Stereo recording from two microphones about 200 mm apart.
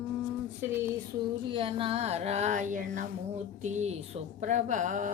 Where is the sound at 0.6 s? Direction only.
10° right (ahead or behind).